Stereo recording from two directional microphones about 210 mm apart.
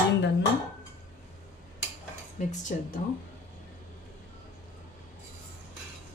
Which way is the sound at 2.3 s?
35° left (ahead or behind).